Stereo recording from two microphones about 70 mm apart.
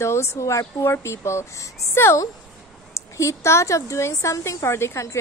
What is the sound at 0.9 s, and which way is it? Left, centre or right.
A woman's voice, left.